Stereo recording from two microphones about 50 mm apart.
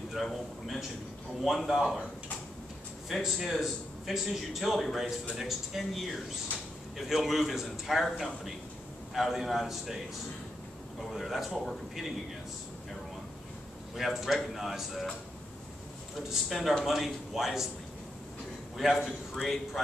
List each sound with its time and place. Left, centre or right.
0.1 s a man's voice: centre
3.1 s a man's voice: centre
11.0 s a man's voice: centre
13.9 s a man's voice: centre
16.3 s a man's voice: centre
18.8 s a man's voice: centre